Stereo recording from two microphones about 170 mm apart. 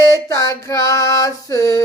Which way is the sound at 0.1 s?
20° left (ahead or behind).